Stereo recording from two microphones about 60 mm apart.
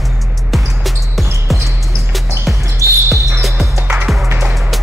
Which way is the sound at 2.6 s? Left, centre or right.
Right.